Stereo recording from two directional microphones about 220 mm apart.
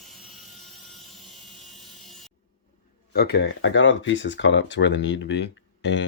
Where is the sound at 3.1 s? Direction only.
45° left (ahead or behind).